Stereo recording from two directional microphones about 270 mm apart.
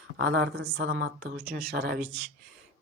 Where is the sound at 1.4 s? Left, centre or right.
Right.